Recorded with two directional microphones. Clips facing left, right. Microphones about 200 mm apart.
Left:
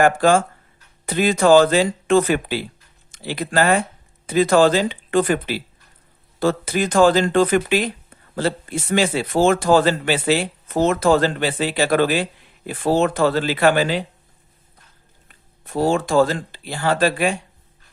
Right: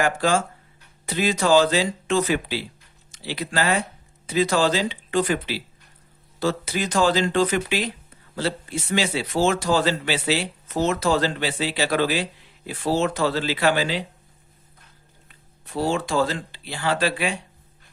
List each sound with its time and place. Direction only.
0.0 s speech: 50° left (ahead or behind)
15.3 s speech: 45° left (ahead or behind)